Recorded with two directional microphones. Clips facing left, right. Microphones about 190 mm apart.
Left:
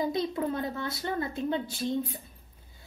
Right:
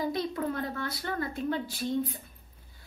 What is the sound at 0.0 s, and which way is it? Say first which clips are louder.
A woman's voice: left 2 dB; 20° left (ahead or behind).